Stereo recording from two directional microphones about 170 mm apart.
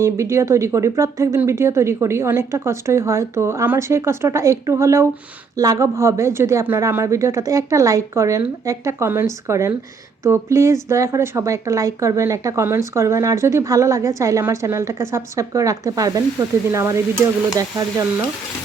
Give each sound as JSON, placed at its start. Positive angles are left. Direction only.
{"t": 0.0, "sound": "a woman's voice", "side_deg": -15}